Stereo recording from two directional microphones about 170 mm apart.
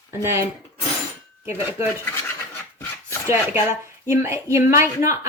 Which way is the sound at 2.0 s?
10° left (ahead or behind).